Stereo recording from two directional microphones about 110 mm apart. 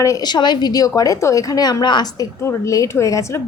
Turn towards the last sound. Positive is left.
turn(degrees=30)  # may be behind; listen again after turning